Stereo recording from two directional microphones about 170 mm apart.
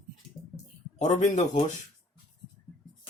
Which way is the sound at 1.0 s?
45° left (ahead or behind).